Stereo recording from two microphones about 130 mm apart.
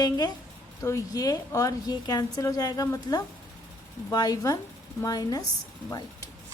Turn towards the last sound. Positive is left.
turn(degrees=25)  # may be behind; listen again after turning